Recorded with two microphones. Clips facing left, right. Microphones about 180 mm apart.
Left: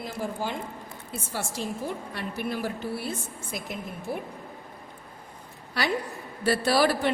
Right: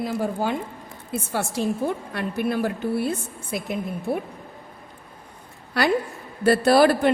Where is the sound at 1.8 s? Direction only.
55° right (ahead or behind).